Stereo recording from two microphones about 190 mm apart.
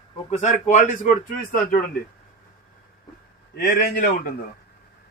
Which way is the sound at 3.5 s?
45° left (ahead or behind).